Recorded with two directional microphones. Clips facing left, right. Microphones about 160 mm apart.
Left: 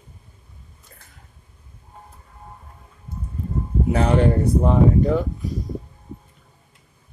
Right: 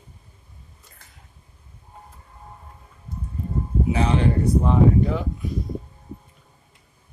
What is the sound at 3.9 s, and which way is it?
Speech, 50° left (ahead or behind).